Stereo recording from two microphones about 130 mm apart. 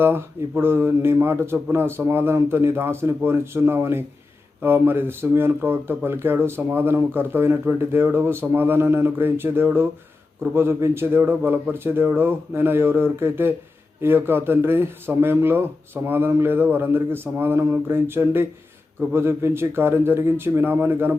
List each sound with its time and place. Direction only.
0.0 s speech: 15° right (ahead or behind)